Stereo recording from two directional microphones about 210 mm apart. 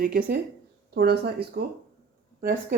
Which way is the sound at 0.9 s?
50° right (ahead or behind).